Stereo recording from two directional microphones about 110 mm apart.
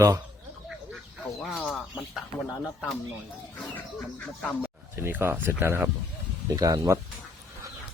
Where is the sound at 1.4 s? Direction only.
5° left (ahead or behind).